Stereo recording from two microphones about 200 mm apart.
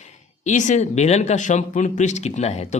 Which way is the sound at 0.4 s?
35° left (ahead or behind).